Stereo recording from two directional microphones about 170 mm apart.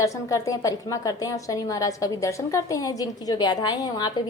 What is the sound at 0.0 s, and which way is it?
A woman's voice, 20° left (ahead or behind).